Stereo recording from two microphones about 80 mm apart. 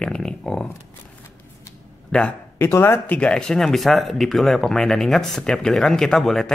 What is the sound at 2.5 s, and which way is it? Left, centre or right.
Speech, left.